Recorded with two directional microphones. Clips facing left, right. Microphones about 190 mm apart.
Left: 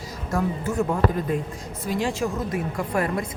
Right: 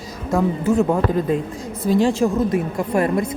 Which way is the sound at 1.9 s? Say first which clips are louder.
Right 8 dB; 30° right (ahead or behind).